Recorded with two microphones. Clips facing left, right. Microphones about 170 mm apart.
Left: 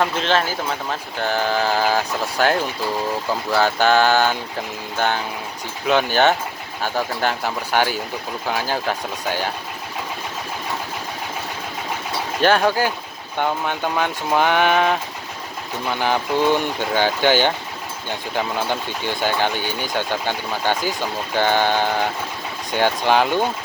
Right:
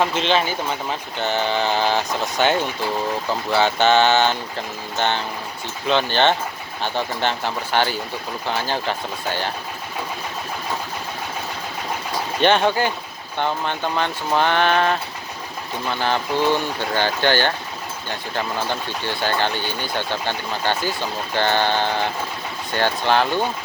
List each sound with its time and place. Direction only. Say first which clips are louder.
0.0 s speech: even; centre (ahead or behind)
12.4 s speech: even; 5° left (ahead or behind)